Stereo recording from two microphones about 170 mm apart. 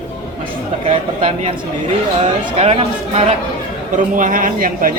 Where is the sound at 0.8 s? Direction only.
35° right (ahead or behind).